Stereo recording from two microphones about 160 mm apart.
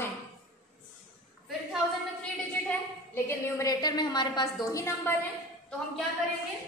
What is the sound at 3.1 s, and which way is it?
A woman's voice, 15° left (ahead or behind).